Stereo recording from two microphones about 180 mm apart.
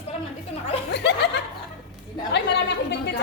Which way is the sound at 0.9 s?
70° left (ahead or behind).